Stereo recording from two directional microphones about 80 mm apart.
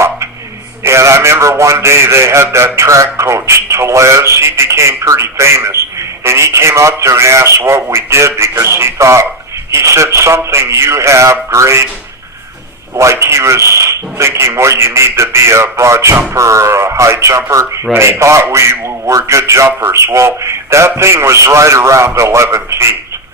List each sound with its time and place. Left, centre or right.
0.9 s a man's voice: right
13.0 s a man's voice: right